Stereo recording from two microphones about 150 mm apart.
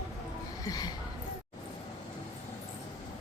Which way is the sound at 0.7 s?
25° left (ahead or behind).